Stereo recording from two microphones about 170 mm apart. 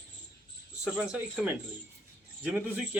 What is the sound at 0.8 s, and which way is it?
A man's voice, 5° right (ahead or behind).